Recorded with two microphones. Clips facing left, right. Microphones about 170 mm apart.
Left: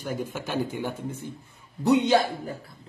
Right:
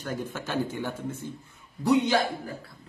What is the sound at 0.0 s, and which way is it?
A man's voice, 10° left (ahead or behind).